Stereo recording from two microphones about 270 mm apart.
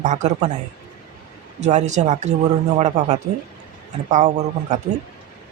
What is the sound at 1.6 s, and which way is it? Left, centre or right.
Speech, right.